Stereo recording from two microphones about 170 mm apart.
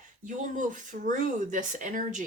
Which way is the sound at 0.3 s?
50° right (ahead or behind).